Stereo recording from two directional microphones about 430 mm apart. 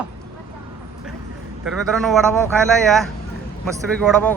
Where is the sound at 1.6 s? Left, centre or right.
Centre.